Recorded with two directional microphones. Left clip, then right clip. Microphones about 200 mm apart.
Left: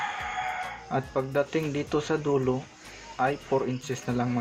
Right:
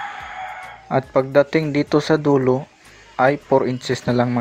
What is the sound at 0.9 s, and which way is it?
Speech, 40° right (ahead or behind).